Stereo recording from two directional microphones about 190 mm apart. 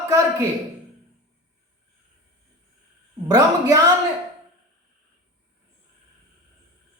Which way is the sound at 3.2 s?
20° right (ahead or behind).